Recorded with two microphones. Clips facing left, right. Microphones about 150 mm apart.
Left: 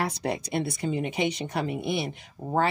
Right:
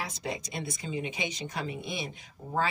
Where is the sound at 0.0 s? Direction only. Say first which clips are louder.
Left 7 dB; 65° left (ahead or behind).